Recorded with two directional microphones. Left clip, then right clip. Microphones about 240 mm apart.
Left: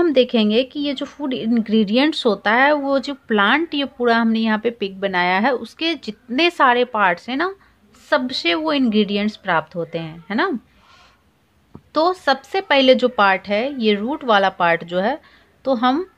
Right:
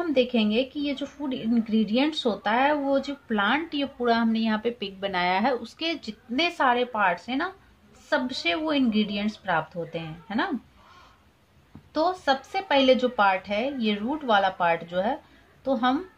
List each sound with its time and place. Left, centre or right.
0.0 s a woman's voice: left
11.9 s a woman's voice: left